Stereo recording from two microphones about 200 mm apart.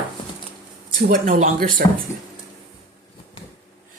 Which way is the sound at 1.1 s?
40° right (ahead or behind).